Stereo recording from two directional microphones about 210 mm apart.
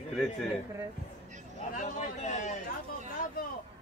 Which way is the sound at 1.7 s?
35° left (ahead or behind).